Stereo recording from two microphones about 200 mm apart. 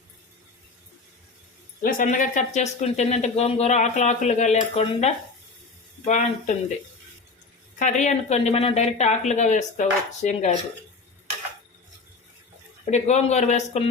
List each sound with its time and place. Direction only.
1.8 s speech: 45° left (ahead or behind)
7.8 s speech: 35° left (ahead or behind)
12.8 s speech: 35° left (ahead or behind)